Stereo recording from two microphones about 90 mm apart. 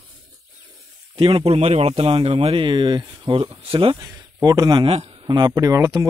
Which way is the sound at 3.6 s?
85° right.